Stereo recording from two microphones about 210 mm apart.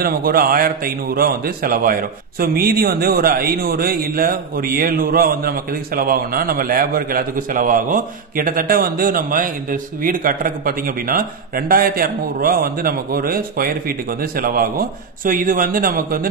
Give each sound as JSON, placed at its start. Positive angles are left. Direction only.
{"t": 0.0, "sound": "a man's voice", "side_deg": -45}